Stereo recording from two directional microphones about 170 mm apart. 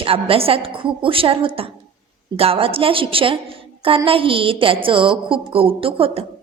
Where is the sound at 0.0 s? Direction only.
35° right (ahead or behind).